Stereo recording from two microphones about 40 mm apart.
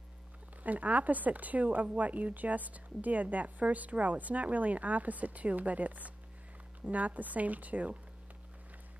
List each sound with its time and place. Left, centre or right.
0.7 s speech: right